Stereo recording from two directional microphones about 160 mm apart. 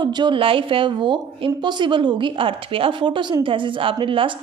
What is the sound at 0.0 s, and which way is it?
A woman's voice, 30° right (ahead or behind).